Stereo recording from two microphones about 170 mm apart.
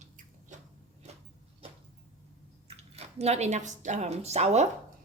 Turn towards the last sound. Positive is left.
turn(degrees=-40)  # may be behind; listen again after turning